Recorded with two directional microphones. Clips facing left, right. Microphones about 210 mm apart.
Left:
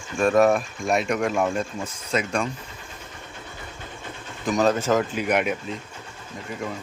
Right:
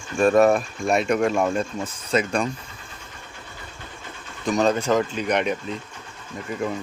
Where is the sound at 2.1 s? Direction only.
35° right (ahead or behind).